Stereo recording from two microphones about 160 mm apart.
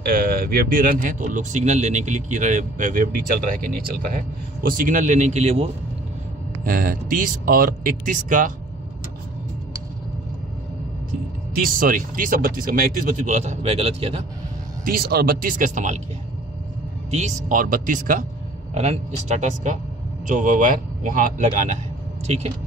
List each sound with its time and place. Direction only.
0.0 s speech: 65° right (ahead or behind); by 5.7 s 40° right (ahead or behind)
6.6 s speech: 60° right (ahead or behind)
11.5 s speech: 60° right (ahead or behind)
13.4 s speech: 40° right (ahead or behind)
14.9 s speech: 70° right (ahead or behind); by 16.0 s 50° right (ahead or behind)
17.1 s speech: 50° right (ahead or behind)
18.8 s speech: 45° right (ahead or behind)